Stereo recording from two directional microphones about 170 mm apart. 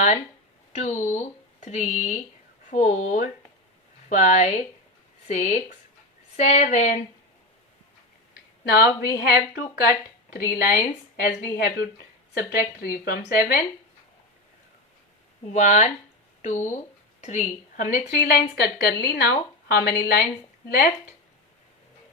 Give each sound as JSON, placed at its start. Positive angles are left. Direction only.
{"t": 0.7, "sound": "speech", "side_deg": 45}
{"t": 8.6, "sound": "a woman's voice", "side_deg": 65}
{"t": 11.5, "sound": "a woman's voice", "side_deg": 65}
{"t": 15.5, "sound": "a woman's voice", "side_deg": 45}